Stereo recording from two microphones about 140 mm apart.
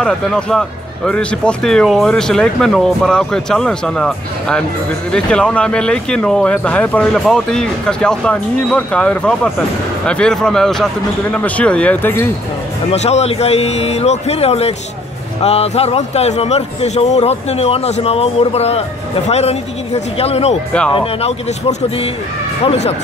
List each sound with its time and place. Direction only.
0.0 s speech: 5° left (ahead or behind)
12.9 s a man's voice: 50° left (ahead or behind)